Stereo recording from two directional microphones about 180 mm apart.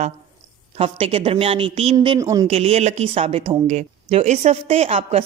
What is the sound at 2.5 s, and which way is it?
Speech, 35° right (ahead or behind).